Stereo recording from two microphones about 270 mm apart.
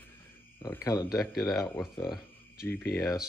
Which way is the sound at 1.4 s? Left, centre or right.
Centre.